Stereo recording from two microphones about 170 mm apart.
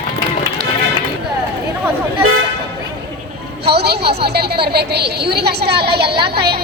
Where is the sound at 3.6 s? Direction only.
70° right (ahead or behind).